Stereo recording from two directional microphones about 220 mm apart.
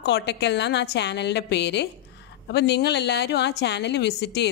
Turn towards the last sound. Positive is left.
turn(degrees=50)  # may be behind; listen again after turning